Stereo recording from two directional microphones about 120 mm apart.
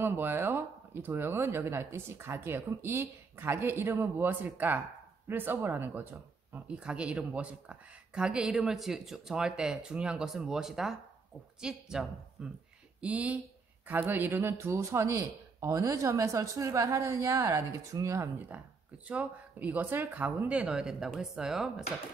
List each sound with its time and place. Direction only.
0.0 s a woman's voice: 20° right (ahead or behind)
18.5 s speech: 15° right (ahead or behind)